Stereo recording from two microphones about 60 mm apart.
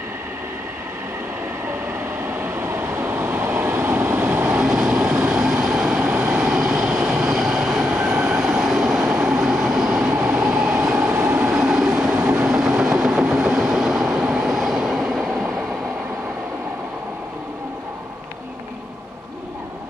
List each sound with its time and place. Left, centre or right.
2.3 s train: right
3.6 s vehicle: right
4.6 s vehicle: centre
6.0 s vehicle: right
6.3 s train: centre
10.2 s train: right
11.3 s train: centre
12.1 s train: right
12.4 s vehicle: centre
13.2 s train: centre